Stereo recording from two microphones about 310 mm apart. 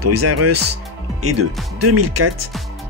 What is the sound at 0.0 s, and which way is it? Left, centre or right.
Speech, right.